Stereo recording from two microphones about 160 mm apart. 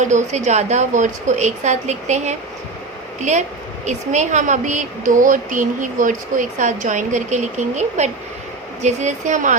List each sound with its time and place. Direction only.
0.0 s a woman's voice: 50° right (ahead or behind)